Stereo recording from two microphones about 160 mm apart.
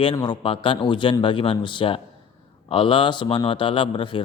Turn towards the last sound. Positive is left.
turn(degrees=30)  # may be behind; listen again after turning